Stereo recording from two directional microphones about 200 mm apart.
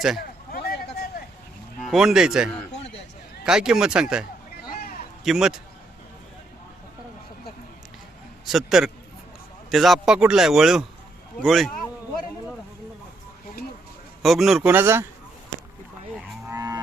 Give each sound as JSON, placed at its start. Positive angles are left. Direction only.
{"t": 0.5, "sound": "a sound", "side_deg": 50}
{"t": 1.9, "sound": "speech", "side_deg": 0}
{"t": 4.7, "sound": "a sound", "side_deg": 45}
{"t": 5.2, "sound": "speech", "side_deg": 0}
{"t": 8.4, "sound": "speech", "side_deg": 0}
{"t": 14.2, "sound": "speech", "side_deg": 0}
{"t": 16.5, "sound": "cattle", "side_deg": -15}